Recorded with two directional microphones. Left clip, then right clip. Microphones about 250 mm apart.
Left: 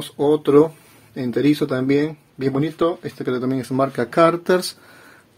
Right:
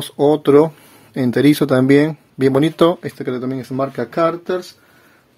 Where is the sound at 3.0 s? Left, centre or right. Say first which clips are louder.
Even; centre.